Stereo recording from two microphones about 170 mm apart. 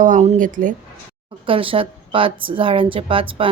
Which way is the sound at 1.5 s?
30° right (ahead or behind).